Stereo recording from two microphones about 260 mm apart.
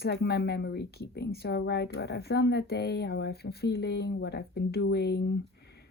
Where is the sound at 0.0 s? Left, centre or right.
Left.